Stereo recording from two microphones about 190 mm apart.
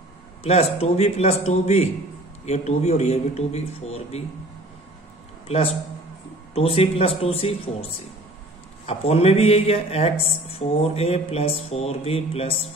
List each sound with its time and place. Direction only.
0.4 s speech: 35° left (ahead or behind)
5.5 s speech: 30° left (ahead or behind)